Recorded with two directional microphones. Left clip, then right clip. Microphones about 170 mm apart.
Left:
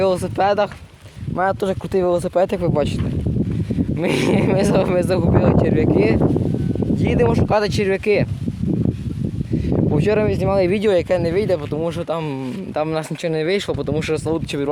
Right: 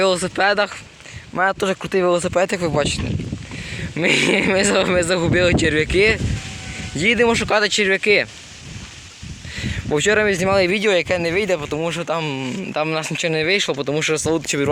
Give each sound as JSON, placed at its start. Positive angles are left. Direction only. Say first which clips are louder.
{"t": 0.0, "sound": "speech", "louder": "even", "side_deg": 0}
{"t": 4.0, "sound": "speech", "louder": "right 3 dB", "side_deg": 0}
{"t": 9.6, "sound": "speech", "louder": "right 1 dB", "side_deg": 0}
{"t": 10.7, "sound": "speech", "louder": "left 1 dB", "side_deg": 25}